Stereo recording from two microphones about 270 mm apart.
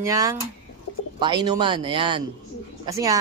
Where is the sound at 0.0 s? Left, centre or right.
Centre.